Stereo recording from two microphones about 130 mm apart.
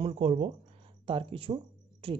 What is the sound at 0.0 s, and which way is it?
Speech, 50° right (ahead or behind).